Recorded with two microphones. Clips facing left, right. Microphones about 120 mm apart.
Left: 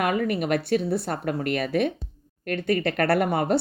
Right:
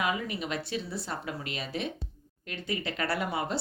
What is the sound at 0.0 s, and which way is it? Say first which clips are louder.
A woman's voice: left 7 dB; 60° left (ahead or behind).